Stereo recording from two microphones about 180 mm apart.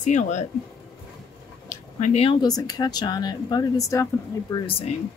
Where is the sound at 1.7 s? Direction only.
40° left (ahead or behind).